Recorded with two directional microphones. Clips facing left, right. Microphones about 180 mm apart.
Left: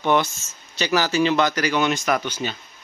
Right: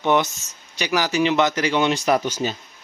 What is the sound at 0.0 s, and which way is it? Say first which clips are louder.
Speech: right 1 dB; 20° right (ahead or behind).